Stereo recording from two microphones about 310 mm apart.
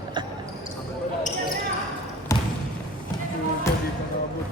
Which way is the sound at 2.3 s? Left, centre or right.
Centre.